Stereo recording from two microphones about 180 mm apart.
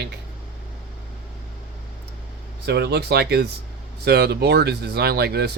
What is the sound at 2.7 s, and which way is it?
Speech, 65° right (ahead or behind).